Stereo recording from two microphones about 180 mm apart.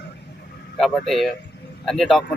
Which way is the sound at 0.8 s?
Centre (ahead or behind).